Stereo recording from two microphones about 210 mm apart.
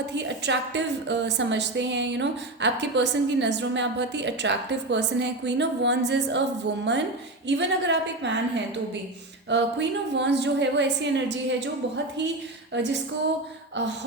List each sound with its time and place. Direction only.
0.1 s a woman's voice: 55° right (ahead or behind)
7.4 s a woman's voice: 55° right (ahead or behind)
12.7 s a woman's voice: 55° right (ahead or behind)